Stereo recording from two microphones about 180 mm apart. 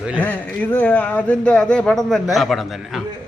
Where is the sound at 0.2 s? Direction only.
10° left (ahead or behind).